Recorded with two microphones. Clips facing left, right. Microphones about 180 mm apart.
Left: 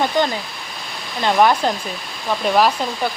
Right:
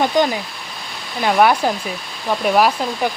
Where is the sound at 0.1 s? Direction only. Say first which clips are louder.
Right 2 dB; 15° right (ahead or behind).